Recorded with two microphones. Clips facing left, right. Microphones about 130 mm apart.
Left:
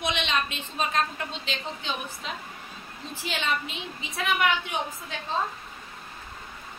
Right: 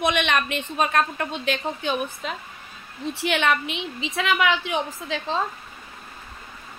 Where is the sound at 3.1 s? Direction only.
70° right (ahead or behind); by 5.3 s 90° right.